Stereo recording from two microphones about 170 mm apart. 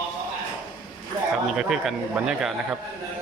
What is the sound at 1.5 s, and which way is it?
Speech, 5° right (ahead or behind).